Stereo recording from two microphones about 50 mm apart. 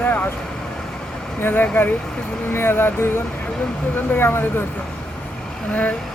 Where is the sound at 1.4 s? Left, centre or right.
Left.